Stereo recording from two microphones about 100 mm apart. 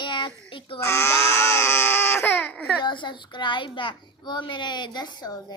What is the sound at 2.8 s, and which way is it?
A child's voice, 50° left (ahead or behind).